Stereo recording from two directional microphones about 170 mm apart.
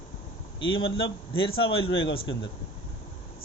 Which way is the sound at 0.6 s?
30° left (ahead or behind).